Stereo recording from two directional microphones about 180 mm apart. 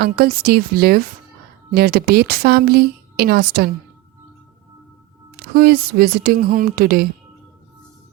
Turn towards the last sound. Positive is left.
turn(degrees=-55)  # may be behind; listen again after turning